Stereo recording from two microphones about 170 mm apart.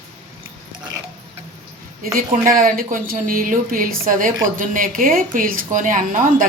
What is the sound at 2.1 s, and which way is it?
A woman's voice, 55° right (ahead or behind).